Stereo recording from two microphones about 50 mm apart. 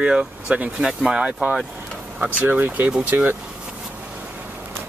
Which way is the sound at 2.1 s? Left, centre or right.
Right.